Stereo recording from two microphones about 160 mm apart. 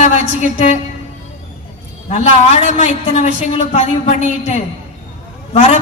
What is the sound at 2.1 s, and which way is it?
A man's voice, 45° left (ahead or behind).